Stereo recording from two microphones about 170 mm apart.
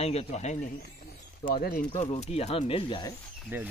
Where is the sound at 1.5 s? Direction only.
65° left (ahead or behind).